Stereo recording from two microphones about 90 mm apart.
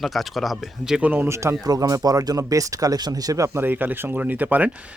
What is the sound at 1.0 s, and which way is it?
Speech, 25° right (ahead or behind).